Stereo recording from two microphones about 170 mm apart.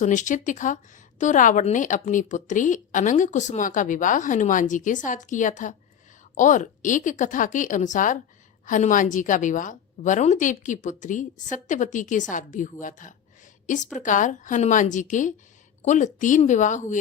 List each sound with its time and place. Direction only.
0.0 s a woman's voice: 45° left (ahead or behind)